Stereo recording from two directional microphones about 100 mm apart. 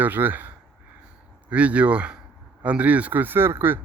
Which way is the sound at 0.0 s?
20° right (ahead or behind).